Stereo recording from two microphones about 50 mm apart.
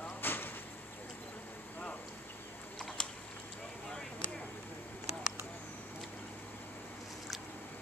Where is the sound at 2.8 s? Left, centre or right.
Centre.